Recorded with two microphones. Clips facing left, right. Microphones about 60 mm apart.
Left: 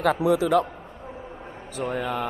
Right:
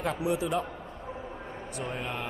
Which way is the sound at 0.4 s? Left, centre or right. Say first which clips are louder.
Left 9 dB; left.